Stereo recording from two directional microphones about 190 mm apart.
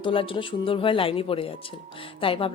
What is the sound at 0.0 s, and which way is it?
A woman's voice, 25° left (ahead or behind).